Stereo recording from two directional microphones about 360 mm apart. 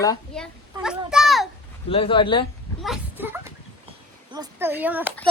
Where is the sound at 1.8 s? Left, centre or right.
Centre.